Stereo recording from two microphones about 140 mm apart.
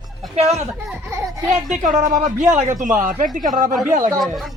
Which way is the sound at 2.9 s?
75° right (ahead or behind).